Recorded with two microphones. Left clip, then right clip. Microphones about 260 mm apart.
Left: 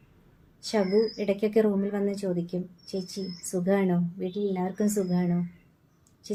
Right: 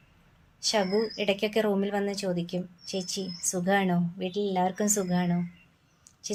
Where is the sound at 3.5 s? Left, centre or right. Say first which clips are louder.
Even; right.